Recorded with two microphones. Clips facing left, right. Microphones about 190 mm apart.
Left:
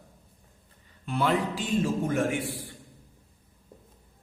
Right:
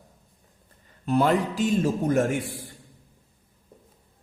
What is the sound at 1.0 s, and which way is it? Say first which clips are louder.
A man's voice: right 5 dB; 40° right (ahead or behind).